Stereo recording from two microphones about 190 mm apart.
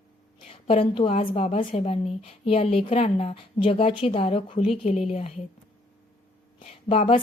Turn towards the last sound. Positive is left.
turn(degrees=30)  # may be behind; listen again after turning